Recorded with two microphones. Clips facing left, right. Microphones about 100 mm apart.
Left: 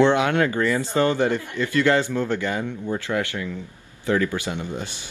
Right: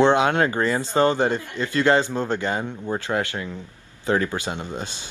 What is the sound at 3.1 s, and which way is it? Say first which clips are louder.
Speech: right 1 dB; 50° right (ahead or behind).